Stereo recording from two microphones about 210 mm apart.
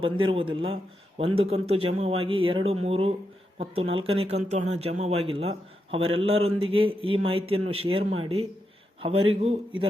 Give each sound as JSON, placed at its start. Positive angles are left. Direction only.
{"t": 0.3, "sound": "speech", "side_deg": -25}